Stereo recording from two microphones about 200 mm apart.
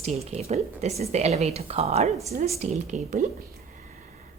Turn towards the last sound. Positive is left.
turn(degrees=-35)  # may be behind; listen again after turning